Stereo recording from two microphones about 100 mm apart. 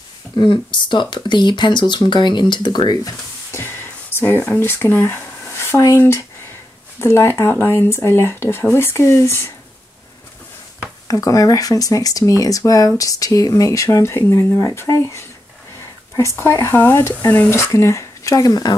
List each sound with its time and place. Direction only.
0.4 s speech: 50° left (ahead or behind)
3.5 s speech: 25° left (ahead or behind)
11.1 s speech: 35° left (ahead or behind)